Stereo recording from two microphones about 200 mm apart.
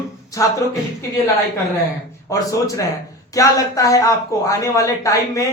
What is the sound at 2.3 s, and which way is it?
Speech, 15° left (ahead or behind).